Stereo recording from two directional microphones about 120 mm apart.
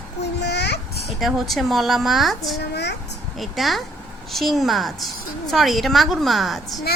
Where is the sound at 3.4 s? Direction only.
Centre (ahead or behind).